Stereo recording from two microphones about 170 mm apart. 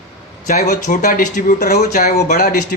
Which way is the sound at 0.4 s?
55° left (ahead or behind).